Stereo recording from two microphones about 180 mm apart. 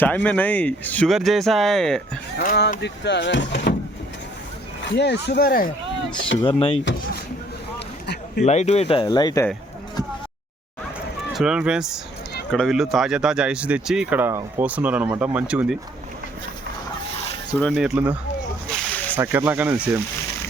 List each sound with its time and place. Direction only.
0.0 s speech: 10° left (ahead or behind)
2.8 s speech: 75° left (ahead or behind)
4.9 s speech: 70° left (ahead or behind); by 5.7 s 55° left (ahead or behind)
6.4 s speech: 30° left (ahead or behind)
8.0 s a sound: 70° left (ahead or behind)
8.4 s speech: 40° left (ahead or behind); by 9.5 s 20° left (ahead or behind)
11.3 s speech: 5° right (ahead or behind)
17.6 s speech: centre (ahead or behind)
18.7 s slosh: 5° left (ahead or behind)
19.1 s speech: 10° right (ahead or behind)